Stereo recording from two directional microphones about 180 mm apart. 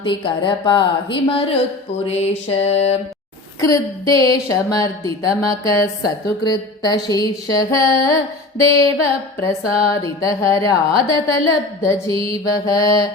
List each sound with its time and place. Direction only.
0.0 s speech: 25° left (ahead or behind)
2.0 s music: 35° left (ahead or behind)
3.6 s speech: 20° left (ahead or behind)
12.1 s mantra: 30° right (ahead or behind)
12.5 s speech: 20° left (ahead or behind)